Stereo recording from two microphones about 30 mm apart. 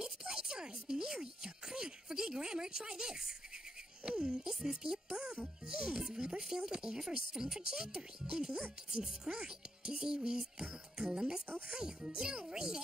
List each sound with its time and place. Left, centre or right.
0.0 s a sound: right
4.2 s speech: right
4.5 s speech: centre